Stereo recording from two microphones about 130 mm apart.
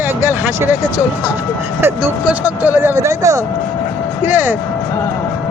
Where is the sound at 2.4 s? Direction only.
15° right (ahead or behind).